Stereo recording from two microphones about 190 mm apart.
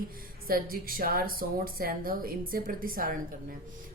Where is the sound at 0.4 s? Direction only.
50° right (ahead or behind).